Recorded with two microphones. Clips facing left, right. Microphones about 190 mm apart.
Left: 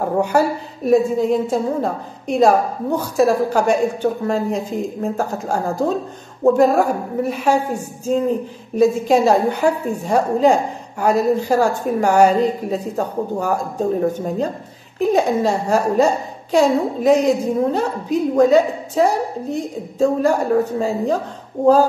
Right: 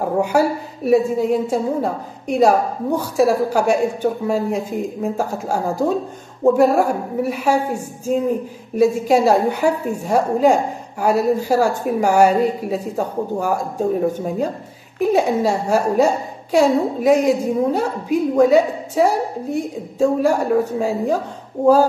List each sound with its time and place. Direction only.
0.0 s a woman's voice: 5° right (ahead or behind)
8.7 s a woman's voice: 10° right (ahead or behind)